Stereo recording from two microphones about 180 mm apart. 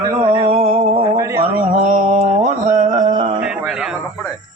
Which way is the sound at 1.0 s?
15° right (ahead or behind).